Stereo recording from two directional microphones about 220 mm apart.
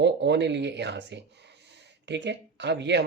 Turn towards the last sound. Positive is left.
turn(degrees=-50)  # may be behind; listen again after turning